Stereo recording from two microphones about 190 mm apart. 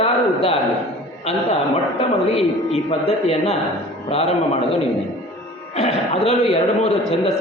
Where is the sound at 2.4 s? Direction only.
30° left (ahead or behind).